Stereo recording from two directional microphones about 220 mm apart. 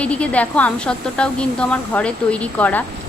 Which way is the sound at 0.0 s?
5° left (ahead or behind).